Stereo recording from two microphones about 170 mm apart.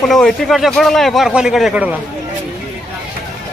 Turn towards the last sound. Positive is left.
turn(degrees=-10)  # may be behind; listen again after turning